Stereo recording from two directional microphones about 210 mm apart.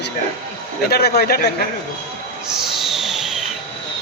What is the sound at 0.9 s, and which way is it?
Speech, 50° left (ahead or behind).